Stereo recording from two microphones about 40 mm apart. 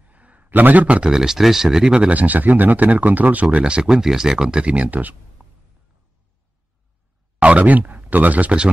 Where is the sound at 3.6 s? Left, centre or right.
Right.